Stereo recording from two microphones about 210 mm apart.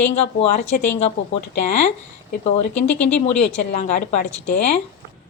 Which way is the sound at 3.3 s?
35° left (ahead or behind).